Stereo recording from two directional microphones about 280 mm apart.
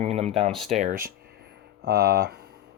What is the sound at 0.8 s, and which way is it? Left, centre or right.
Speech, right.